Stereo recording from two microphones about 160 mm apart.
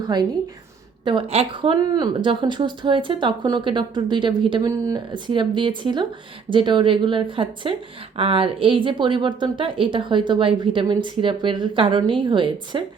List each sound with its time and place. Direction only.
0.0 s a woman's voice: 25° right (ahead or behind)
1.0 s a woman's voice: 35° right (ahead or behind)
4.7 s a woman's voice: 20° right (ahead or behind)